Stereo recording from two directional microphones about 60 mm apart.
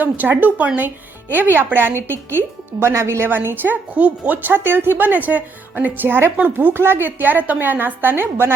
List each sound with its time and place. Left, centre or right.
0.0 s a woman's voice: right
3.2 s speech: right
3.9 s speech: right